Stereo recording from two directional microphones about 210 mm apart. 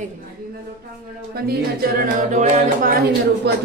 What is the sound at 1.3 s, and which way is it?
Music, 45° right (ahead or behind).